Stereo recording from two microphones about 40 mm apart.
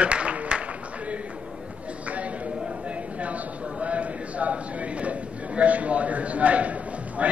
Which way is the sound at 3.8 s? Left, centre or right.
Right.